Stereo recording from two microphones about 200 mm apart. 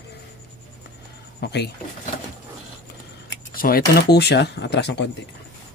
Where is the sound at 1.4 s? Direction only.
55° left (ahead or behind).